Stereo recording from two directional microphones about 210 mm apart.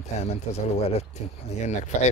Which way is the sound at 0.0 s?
30° left (ahead or behind).